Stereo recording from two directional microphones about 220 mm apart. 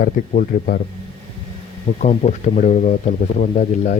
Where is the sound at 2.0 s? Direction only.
35° left (ahead or behind).